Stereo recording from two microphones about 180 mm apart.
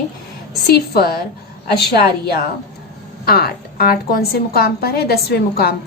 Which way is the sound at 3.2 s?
60° left (ahead or behind).